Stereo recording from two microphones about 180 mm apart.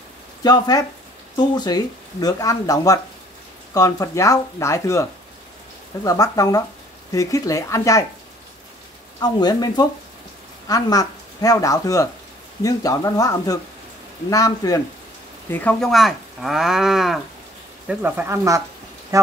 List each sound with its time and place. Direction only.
0.4 s speech: 20° left (ahead or behind)
6.0 s speech: 20° left (ahead or behind)
9.2 s speech: 20° left (ahead or behind)
15.5 s speech: 5° left (ahead or behind); by 18.6 s 15° right (ahead or behind)